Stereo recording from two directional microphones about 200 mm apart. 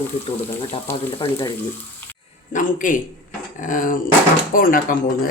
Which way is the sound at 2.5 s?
40° left (ahead or behind).